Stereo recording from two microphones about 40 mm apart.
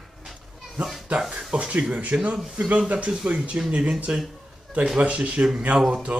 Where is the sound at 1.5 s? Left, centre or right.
Right.